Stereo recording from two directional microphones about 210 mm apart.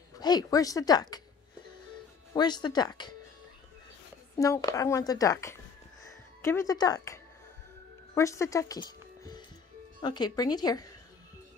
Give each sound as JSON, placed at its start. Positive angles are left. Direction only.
{"t": 0.2, "sound": "a woman's voice", "side_deg": 20}
{"t": 2.3, "sound": "speech", "side_deg": 20}
{"t": 4.4, "sound": "a woman's voice", "side_deg": 15}
{"t": 6.0, "sound": "music", "side_deg": 15}
{"t": 8.1, "sound": "speech", "side_deg": 15}